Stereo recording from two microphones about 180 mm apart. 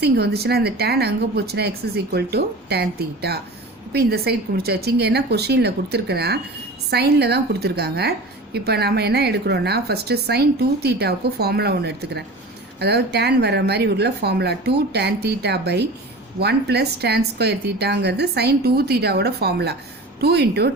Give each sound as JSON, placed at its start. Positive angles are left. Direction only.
{"t": 0.0, "sound": "a woman's voice", "side_deg": -60}